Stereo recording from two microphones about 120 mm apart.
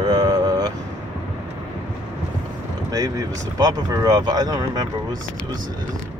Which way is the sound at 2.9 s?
30° right (ahead or behind).